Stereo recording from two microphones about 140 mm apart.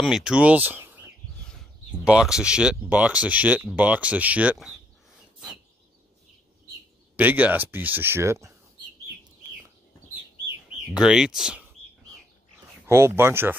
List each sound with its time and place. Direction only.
0.0 s speech: 5° right (ahead or behind)
2.0 s speech: 5° right (ahead or behind)
7.2 s speech: 10° right (ahead or behind)
11.0 s speech: 5° right (ahead or behind)
12.8 s speech: 20° right (ahead or behind)